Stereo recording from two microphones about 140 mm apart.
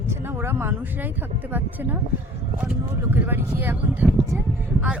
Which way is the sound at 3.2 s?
15° right (ahead or behind).